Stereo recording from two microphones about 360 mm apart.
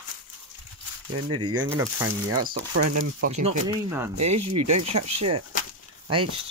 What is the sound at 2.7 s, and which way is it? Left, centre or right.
Speech, right.